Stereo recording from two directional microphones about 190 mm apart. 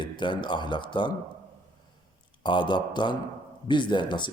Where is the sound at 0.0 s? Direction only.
25° left (ahead or behind).